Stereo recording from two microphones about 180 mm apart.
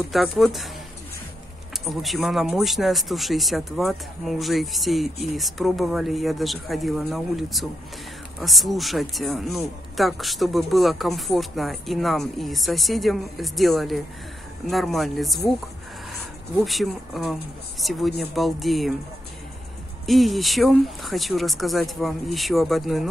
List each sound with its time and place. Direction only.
0.0 s speech: centre (ahead or behind)
1.9 s speech: centre (ahead or behind)
16.5 s speech: centre (ahead or behind)
20.1 s speech: centre (ahead or behind)